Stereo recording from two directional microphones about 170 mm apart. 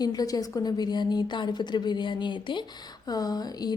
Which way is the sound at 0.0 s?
20° left (ahead or behind).